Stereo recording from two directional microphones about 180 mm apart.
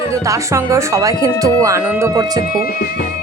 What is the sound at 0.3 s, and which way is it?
Speech, 15° right (ahead or behind).